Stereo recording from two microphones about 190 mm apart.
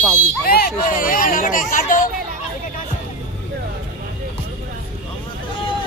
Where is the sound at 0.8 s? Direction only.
45° left (ahead or behind).